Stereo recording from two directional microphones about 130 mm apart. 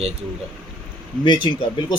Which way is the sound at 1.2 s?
40° left (ahead or behind).